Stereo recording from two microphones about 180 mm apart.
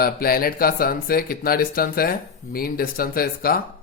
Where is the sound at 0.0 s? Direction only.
55° left (ahead or behind).